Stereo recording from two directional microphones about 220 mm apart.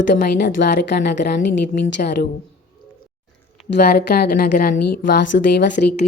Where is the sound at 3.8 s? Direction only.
45° left (ahead or behind).